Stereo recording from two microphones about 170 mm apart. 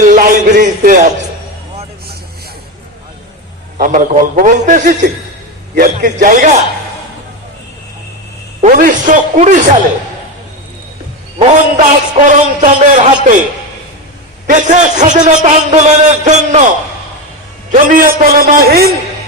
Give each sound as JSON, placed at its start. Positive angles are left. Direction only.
{"t": 0.0, "sound": "a sound", "side_deg": -50}
{"t": 3.8, "sound": "a man's voice", "side_deg": -50}
{"t": 8.6, "sound": "a man's voice", "side_deg": -45}
{"t": 11.4, "sound": "a man's voice", "side_deg": -45}
{"t": 14.4, "sound": "a man's voice", "side_deg": -45}
{"t": 17.7, "sound": "a man's voice", "side_deg": -50}